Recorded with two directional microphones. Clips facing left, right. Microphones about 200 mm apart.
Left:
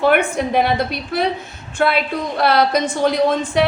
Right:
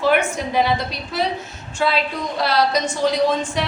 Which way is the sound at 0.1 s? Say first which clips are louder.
Left 3 dB; 55° left (ahead or behind).